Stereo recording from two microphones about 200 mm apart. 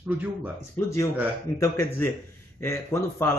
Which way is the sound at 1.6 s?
15° left (ahead or behind).